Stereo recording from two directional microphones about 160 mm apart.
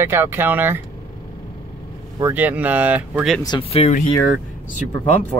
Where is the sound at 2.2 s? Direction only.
10° right (ahead or behind).